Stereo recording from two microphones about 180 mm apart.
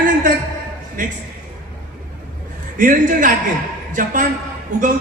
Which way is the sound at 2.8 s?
45° right (ahead or behind).